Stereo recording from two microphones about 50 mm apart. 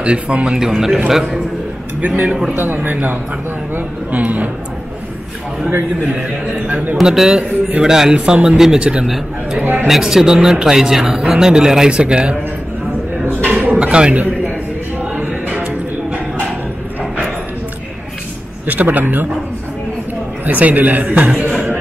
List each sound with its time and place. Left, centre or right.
0.0 s speech: right
0.6 s speech: centre
2.0 s a man's voice: right
7.0 s speech: centre
9.8 s speech: centre
13.2 s a sound: right
15.1 s music: right
18.7 s speech: right
20.4 s speech: right
21.5 s music: centre